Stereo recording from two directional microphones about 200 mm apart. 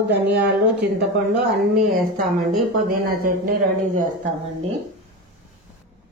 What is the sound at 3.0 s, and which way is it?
Speech, 45° right (ahead or behind).